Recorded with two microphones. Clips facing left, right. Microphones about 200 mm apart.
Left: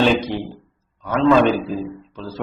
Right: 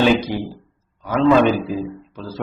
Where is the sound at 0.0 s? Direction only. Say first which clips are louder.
Right 1 dB; 10° right (ahead or behind).